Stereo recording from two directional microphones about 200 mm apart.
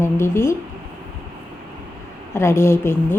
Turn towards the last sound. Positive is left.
turn(degrees=10)  # may be behind; listen again after turning